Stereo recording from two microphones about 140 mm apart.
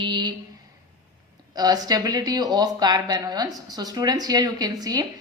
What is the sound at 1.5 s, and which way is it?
Speech, 25° right (ahead or behind).